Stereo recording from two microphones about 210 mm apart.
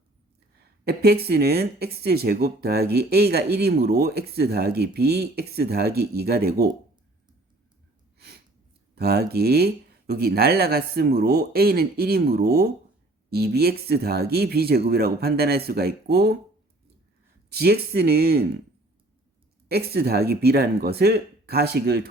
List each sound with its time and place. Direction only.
0.6 s speech: 50° right (ahead or behind)
9.0 s speech: 50° right (ahead or behind)
17.5 s speech: 50° right (ahead or behind)
19.6 s speech: 50° right (ahead or behind)